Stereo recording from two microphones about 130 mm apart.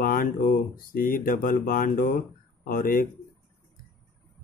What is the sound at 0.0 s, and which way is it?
Speech, 90° left.